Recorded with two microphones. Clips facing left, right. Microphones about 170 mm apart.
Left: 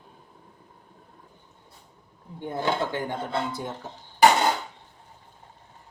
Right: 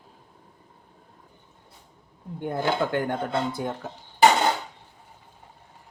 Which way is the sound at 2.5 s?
55° right (ahead or behind).